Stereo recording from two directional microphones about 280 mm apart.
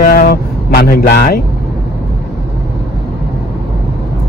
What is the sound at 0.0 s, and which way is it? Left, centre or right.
Speech, left.